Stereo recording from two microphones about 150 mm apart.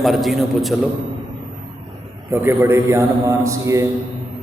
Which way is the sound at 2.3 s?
15° right (ahead or behind).